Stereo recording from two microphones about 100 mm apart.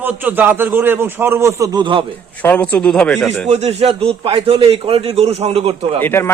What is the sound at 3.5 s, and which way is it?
A man's voice, 90° right.